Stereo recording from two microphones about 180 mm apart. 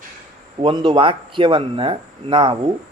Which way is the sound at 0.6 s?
25° right (ahead or behind).